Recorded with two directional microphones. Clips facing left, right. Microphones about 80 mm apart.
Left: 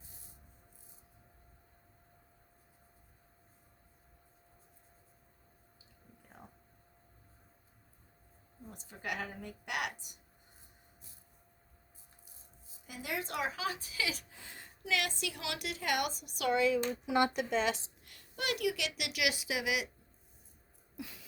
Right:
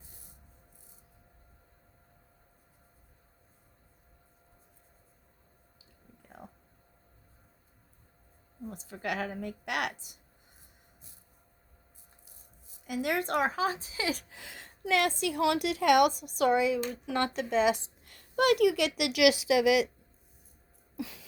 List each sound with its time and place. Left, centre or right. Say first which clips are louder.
8.9 s a woman's voice: right 6 dB; right
12.2 s speech: right 1 dB; right
14.3 s a woman's voice: right 4 dB; right
14.8 s a woman's voice: right 8 dB; right
16.2 s speech: right 10 dB; right
16.5 s speech: right 3 dB; centre
16.9 s speech: left 1 dB; centre
17.5 s speech: right 6 dB; centre
18.0 s a woman's voice: right 13 dB; right
20.9 s a sound: right 7 dB; right